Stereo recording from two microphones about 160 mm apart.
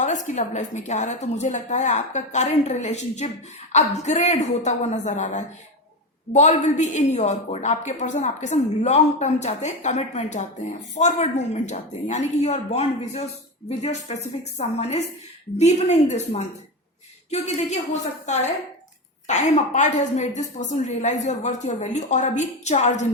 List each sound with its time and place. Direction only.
0.0 s a woman's voice: 50° left (ahead or behind)